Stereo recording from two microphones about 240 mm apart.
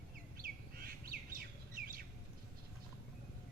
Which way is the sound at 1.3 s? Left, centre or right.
Right.